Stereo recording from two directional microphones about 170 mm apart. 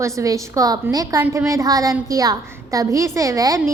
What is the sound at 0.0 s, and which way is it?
A woman's voice, 20° right (ahead or behind).